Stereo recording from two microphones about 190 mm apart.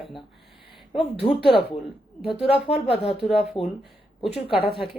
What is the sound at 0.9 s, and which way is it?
Speech, 30° left (ahead or behind).